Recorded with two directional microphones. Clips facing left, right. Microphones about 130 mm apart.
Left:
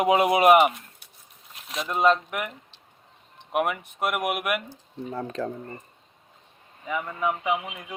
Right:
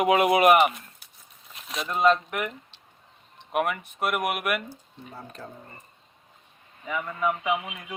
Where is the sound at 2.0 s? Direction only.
15° left (ahead or behind).